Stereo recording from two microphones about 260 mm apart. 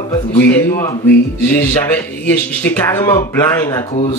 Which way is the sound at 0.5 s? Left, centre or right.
Centre.